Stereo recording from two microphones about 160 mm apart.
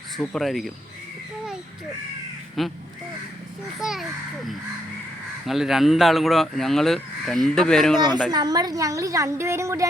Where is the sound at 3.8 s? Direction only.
Centre (ahead or behind).